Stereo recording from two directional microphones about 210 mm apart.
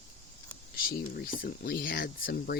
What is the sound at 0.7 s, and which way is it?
Speech, 45° left (ahead or behind).